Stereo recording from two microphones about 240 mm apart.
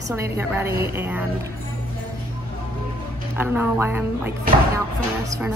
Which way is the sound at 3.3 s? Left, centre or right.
Centre.